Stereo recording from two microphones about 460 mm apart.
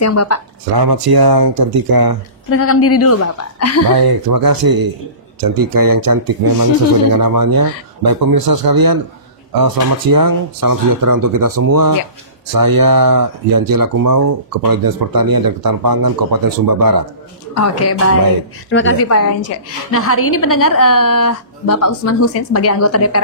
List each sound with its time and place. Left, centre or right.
0.0 s speech: left
0.7 s speech: right
2.5 s a woman's voice: left
3.9 s speech: right
17.6 s a woman's voice: left